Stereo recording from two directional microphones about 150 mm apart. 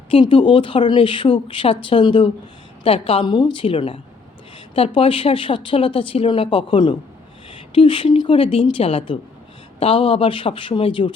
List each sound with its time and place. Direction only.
0.1 s speech: 35° left (ahead or behind)